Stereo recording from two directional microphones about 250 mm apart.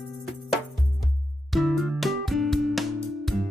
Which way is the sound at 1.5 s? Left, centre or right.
Centre.